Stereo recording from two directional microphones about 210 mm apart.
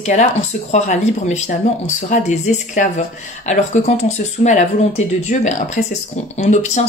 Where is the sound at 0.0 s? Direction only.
35° left (ahead or behind).